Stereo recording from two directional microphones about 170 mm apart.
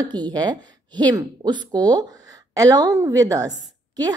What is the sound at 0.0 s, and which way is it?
A woman's voice, 25° right (ahead or behind).